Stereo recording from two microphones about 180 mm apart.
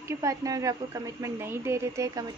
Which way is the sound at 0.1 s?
15° right (ahead or behind).